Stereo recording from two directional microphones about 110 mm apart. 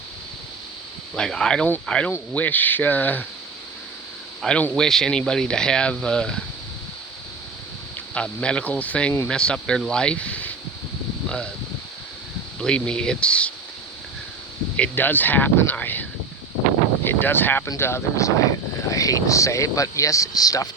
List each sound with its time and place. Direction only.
1.1 s speech: 5° left (ahead or behind)
4.4 s speech: 10° left (ahead or behind)
8.1 s speech: 10° left (ahead or behind)
12.5 s speech: 10° left (ahead or behind)
14.8 s speech: 15° left (ahead or behind); by 20.7 s 35° left (ahead or behind)